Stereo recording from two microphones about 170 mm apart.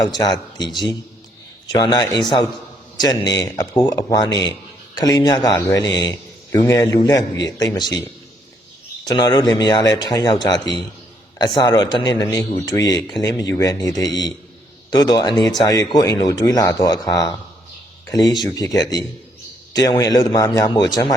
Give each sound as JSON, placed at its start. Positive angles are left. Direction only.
{"t": 0.1, "sound": "speech", "side_deg": 25}
{"t": 9.0, "sound": "speech", "side_deg": 25}
{"t": 18.4, "sound": "speech", "side_deg": 20}